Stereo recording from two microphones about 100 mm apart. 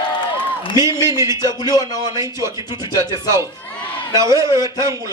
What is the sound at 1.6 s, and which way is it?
Speech, 45° left (ahead or behind).